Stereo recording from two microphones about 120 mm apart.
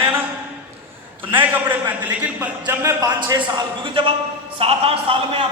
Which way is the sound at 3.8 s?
45° right (ahead or behind).